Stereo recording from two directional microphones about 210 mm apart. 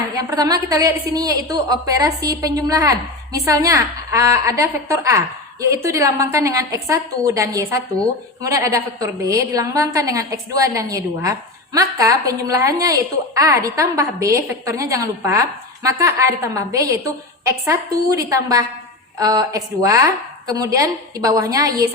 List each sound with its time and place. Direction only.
0.2 s a woman's voice: 15° right (ahead or behind)